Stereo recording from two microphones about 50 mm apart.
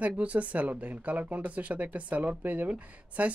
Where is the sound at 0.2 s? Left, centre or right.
Right.